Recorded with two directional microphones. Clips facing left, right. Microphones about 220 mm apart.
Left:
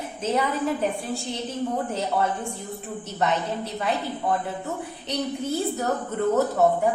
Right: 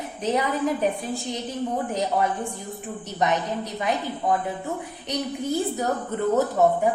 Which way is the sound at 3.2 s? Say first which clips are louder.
Right 1 dB; 15° right (ahead or behind).